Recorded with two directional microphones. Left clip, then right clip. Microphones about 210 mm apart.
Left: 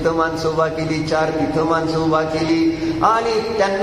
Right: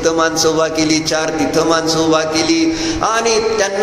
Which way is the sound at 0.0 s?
45° right (ahead or behind).